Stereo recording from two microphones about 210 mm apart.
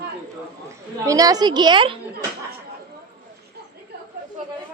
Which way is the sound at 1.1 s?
15° right (ahead or behind).